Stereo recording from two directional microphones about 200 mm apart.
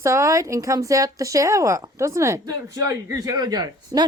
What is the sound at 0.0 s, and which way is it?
Speech, 15° right (ahead or behind).